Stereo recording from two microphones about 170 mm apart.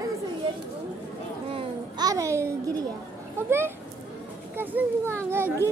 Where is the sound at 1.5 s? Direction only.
25° right (ahead or behind).